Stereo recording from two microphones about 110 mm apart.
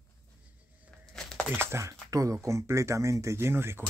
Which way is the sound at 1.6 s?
25° right (ahead or behind).